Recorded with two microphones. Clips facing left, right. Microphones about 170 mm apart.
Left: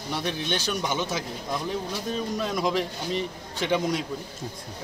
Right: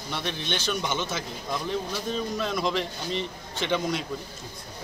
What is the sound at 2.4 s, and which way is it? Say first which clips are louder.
Speech: left 3 dB; 10° left (ahead or behind).